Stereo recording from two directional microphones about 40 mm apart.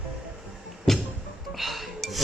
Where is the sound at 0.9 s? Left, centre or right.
Centre.